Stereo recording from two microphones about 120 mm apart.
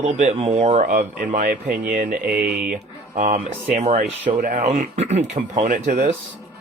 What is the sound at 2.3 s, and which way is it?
Speech, 10° right (ahead or behind).